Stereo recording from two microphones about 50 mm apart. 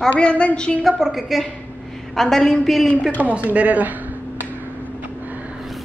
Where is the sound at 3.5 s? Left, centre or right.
Right.